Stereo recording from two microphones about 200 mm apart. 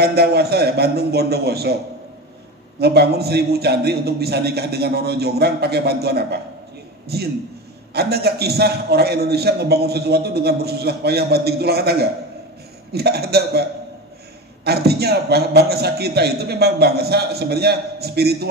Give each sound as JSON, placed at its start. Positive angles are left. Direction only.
{"t": 0.0, "sound": "a man's voice", "side_deg": -55}
{"t": 2.8, "sound": "a man's voice", "side_deg": -55}